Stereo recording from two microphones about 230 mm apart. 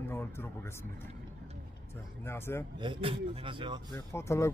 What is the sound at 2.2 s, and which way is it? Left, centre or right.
Speech, centre.